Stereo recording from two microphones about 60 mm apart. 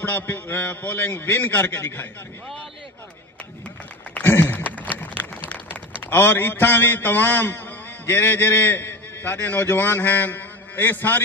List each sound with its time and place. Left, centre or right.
0.0 s a man's voice: left
4.2 s a sound: left
8.1 s a man's voice: left